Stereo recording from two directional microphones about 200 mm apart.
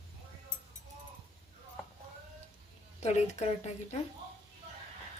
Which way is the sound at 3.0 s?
35° left (ahead or behind).